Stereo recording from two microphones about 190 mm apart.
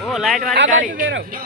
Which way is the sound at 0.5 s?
80° right.